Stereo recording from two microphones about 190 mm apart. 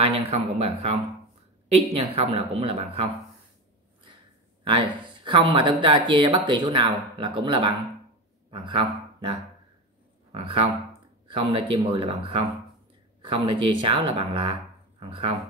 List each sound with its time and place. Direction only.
0.1 s speech: 30° right (ahead or behind)
4.6 s speech: 25° right (ahead or behind)
11.7 s speech: 25° right (ahead or behind)